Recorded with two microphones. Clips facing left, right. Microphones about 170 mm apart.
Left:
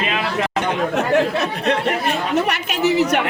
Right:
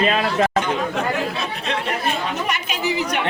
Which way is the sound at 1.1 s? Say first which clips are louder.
Left 7 dB; 65° left (ahead or behind).